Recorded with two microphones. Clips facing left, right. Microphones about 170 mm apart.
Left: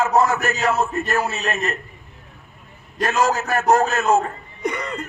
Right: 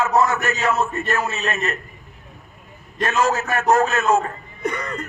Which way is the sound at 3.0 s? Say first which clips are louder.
Even; 35° left (ahead or behind).